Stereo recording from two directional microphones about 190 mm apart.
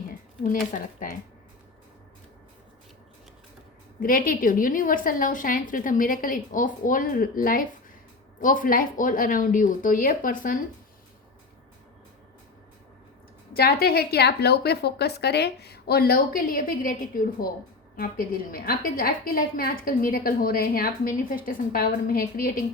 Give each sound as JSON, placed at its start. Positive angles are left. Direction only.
{"t": 4.0, "sound": "a woman's voice", "side_deg": 45}
{"t": 13.5, "sound": "a woman's voice", "side_deg": 55}
{"t": 18.5, "sound": "a woman's voice", "side_deg": 50}